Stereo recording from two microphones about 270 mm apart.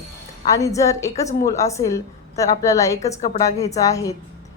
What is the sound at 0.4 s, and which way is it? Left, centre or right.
Speech, centre.